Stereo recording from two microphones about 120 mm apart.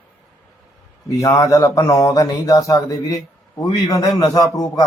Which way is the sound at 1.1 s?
30° left (ahead or behind).